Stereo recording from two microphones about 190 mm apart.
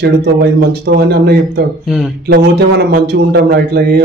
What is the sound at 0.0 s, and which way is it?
A man's voice, 55° right (ahead or behind).